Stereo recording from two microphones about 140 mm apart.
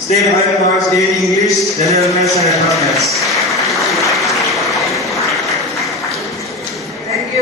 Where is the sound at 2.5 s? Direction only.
Centre (ahead or behind).